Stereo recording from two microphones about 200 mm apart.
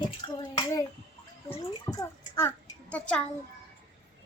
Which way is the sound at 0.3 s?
20° left (ahead or behind).